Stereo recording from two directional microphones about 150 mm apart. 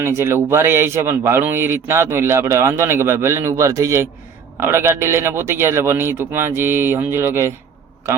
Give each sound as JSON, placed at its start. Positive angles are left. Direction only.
{"t": 0.0, "sound": "speech", "side_deg": -15}